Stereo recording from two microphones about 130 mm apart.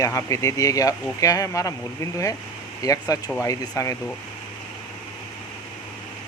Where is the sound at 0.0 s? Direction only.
25° left (ahead or behind).